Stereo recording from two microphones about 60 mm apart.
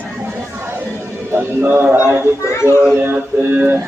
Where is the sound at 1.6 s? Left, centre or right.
Right.